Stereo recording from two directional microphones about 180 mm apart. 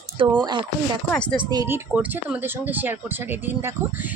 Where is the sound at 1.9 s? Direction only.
10° right (ahead or behind).